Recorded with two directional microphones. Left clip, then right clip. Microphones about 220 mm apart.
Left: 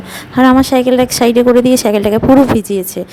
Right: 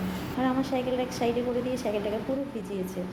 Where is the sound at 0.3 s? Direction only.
55° left (ahead or behind).